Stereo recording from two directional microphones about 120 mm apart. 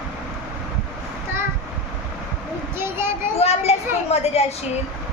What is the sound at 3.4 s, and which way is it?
A woman's voice, 60° left (ahead or behind).